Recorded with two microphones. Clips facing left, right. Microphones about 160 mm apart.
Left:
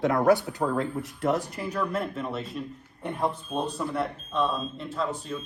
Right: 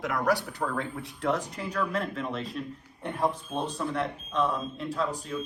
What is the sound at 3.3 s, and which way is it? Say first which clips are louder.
Speech: left 2 dB; 30° left (ahead or behind).